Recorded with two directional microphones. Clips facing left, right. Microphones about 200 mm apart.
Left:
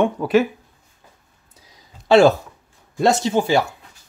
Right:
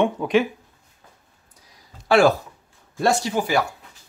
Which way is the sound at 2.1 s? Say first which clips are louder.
Left 4 dB; 25° left (ahead or behind).